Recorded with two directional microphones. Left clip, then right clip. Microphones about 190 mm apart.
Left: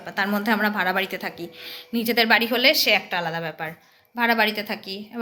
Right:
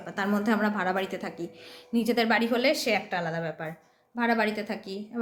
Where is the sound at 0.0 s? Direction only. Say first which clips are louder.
Left 5 dB; 5° right (ahead or behind).